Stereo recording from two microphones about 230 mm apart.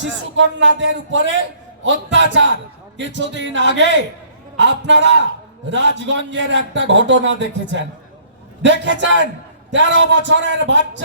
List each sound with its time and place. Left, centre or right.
0.0 s speech: right